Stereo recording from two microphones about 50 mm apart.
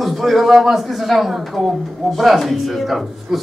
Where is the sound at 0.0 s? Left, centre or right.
Centre.